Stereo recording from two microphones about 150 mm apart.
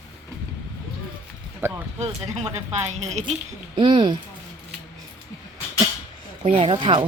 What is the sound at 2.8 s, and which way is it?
Speech, 50° right (ahead or behind).